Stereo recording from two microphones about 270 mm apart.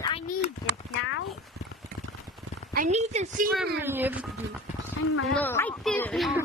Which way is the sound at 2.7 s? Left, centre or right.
Right.